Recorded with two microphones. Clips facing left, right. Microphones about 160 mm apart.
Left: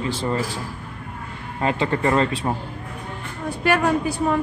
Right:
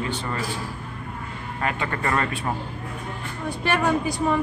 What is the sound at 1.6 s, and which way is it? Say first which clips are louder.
Speech: left 6 dB; 20° left (ahead or behind).